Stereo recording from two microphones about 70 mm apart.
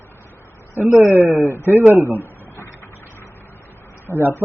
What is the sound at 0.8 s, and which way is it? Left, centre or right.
Speech, left.